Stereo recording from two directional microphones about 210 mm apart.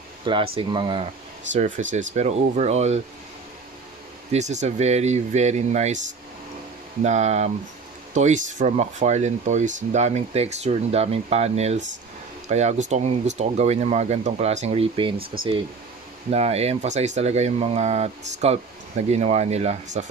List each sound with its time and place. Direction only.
0.2 s speech: 25° right (ahead or behind)
1.5 s speech: 35° right (ahead or behind)
4.3 s speech: 35° right (ahead or behind)
7.0 s speech: 35° right (ahead or behind)
16.3 s speech: 30° right (ahead or behind)